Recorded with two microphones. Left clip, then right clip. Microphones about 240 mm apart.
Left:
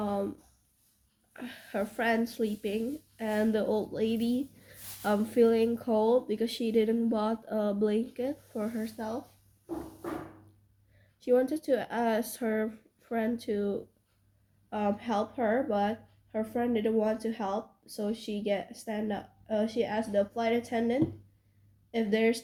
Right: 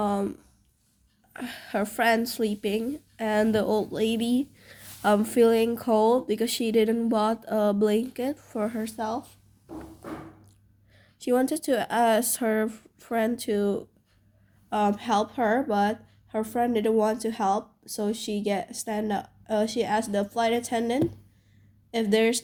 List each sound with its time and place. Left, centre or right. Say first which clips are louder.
0.0 s a sound: right 5 dB; right
1.3 s speech: right 7 dB; right
10.9 s speech: right 1 dB; right